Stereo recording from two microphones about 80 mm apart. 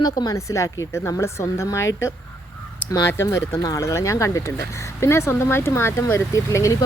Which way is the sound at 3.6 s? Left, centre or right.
Left.